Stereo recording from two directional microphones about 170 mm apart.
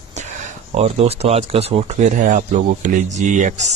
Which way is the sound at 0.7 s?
35° right (ahead or behind).